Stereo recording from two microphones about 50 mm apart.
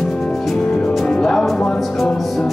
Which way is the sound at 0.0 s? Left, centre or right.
Centre.